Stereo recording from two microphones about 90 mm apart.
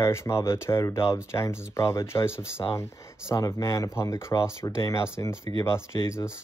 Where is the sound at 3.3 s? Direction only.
35° left (ahead or behind).